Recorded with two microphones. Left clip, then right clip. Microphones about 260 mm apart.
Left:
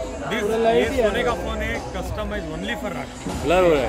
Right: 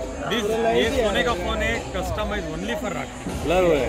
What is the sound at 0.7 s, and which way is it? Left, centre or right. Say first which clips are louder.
Speech: left 1 dB; centre.